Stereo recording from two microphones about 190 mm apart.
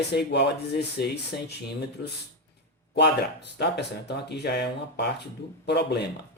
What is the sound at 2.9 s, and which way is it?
Speech, 60° left (ahead or behind).